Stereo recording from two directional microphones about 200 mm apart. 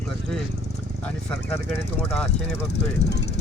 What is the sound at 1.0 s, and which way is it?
Speech, 10° left (ahead or behind).